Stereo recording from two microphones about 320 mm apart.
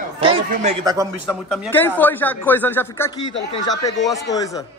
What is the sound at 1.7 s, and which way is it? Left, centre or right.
Speech, centre.